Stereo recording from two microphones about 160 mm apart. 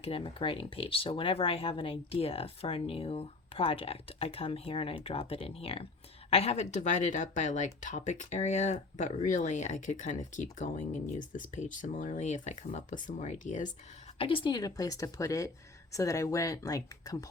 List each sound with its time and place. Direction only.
0.0 s speech: 35° left (ahead or behind)
14.2 s a woman's voice: 35° left (ahead or behind)